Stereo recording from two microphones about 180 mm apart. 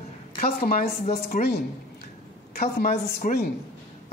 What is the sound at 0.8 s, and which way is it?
Speech, 55° left (ahead or behind).